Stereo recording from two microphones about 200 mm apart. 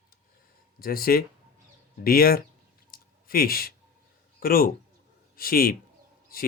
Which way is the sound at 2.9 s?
45° left (ahead or behind).